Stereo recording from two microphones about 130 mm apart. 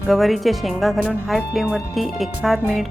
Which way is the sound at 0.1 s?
Centre (ahead or behind).